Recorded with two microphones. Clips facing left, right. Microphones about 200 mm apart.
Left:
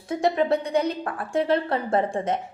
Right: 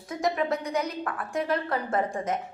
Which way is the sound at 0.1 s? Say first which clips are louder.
Left 5 dB; 30° left (ahead or behind).